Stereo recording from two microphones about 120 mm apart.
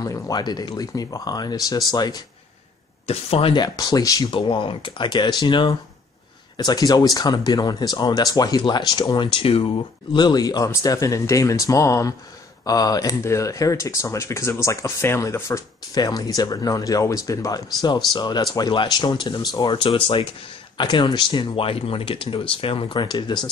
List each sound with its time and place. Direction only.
0.0 s speech: 35° left (ahead or behind)
3.1 s speech: 55° left (ahead or behind)
3.5 s speech: 30° left (ahead or behind)
4.3 s speech: 45° left (ahead or behind)
10.1 s speech: 35° left (ahead or behind)